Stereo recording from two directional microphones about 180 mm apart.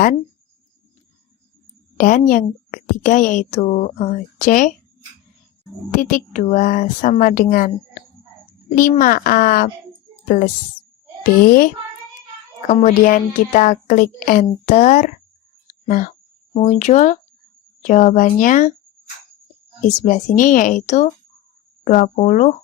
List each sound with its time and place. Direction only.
2.0 s a woman's voice: 45° left (ahead or behind)
5.9 s a woman's voice: 45° left (ahead or behind)
8.7 s a woman's voice: 50° left (ahead or behind)
12.6 s a woman's voice: 45° left (ahead or behind)
19.8 s a woman's voice: 45° left (ahead or behind)